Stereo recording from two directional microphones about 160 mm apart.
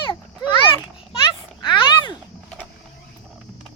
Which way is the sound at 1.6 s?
30° left (ahead or behind).